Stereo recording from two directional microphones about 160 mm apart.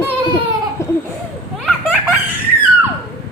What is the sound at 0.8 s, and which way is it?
Laughter, 20° left (ahead or behind).